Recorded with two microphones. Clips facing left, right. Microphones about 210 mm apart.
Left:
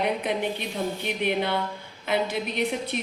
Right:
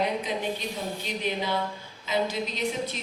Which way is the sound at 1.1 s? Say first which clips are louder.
Left 3 dB; 60° left (ahead or behind).